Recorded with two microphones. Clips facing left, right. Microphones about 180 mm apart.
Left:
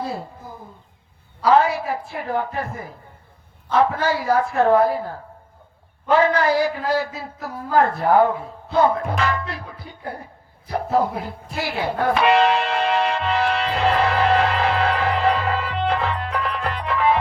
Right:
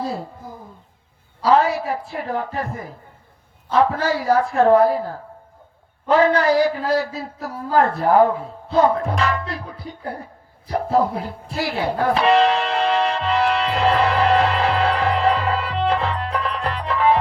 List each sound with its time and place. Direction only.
1.4 s a man's voice: 35° right (ahead or behind)
10.7 s music: 35° right (ahead or behind)